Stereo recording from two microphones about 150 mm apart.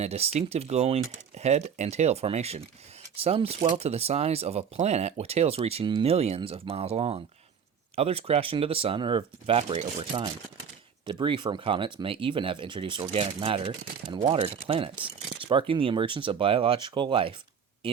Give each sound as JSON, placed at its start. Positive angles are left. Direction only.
{"t": 0.0, "sound": "speech", "side_deg": -45}